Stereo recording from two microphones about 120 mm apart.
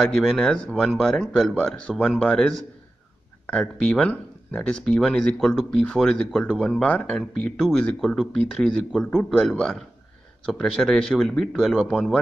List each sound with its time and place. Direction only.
0.4 s speech: 5° left (ahead or behind)